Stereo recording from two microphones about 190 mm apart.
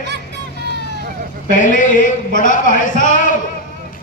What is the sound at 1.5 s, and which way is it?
A man's voice, 40° left (ahead or behind).